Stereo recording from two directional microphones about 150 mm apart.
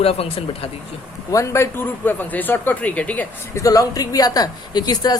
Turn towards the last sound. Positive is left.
turn(degrees=25)  # may be behind; listen again after turning